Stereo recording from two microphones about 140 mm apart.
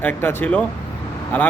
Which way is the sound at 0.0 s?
15° left (ahead or behind).